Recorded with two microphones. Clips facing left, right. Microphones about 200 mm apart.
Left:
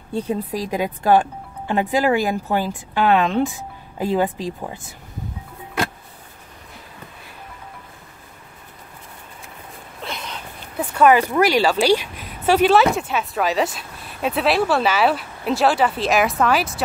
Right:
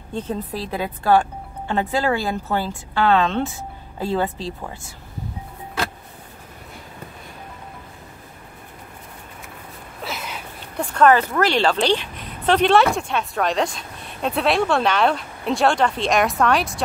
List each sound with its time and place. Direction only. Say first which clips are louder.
0.1 s a woman's voice: left 3 dB; 10° left (ahead or behind)
10.0 s a sound: right 1 dB; 5° right (ahead or behind)
10.8 s a woman's voice: left 1 dB; 5° left (ahead or behind)